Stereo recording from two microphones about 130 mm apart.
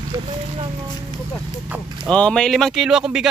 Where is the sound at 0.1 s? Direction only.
40° right (ahead or behind).